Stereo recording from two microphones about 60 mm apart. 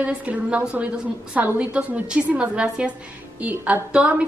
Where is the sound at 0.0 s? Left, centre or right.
Right.